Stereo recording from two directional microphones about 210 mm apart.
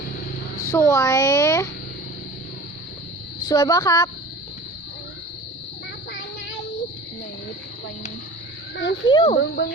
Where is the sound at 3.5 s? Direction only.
15° left (ahead or behind).